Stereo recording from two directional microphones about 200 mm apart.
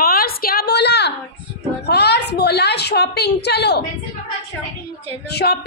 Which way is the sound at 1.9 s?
55° left (ahead or behind).